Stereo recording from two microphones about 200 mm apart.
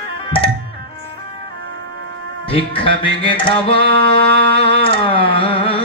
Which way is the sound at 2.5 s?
25° left (ahead or behind).